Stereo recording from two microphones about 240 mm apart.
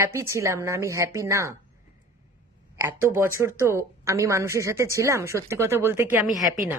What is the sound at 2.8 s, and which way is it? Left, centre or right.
A woman's voice, centre.